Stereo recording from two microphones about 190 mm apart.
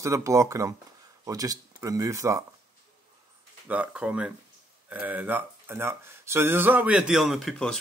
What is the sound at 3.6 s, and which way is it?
Speech, 5° right (ahead or behind).